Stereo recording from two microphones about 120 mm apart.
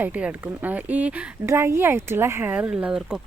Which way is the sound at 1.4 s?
20° right (ahead or behind).